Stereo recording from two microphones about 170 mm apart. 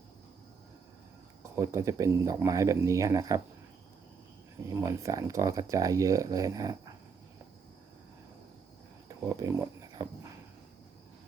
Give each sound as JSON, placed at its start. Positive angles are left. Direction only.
{"t": 1.5, "sound": "speech", "side_deg": -15}
{"t": 4.7, "sound": "speech", "side_deg": -20}
{"t": 9.0, "sound": "a sound", "side_deg": -20}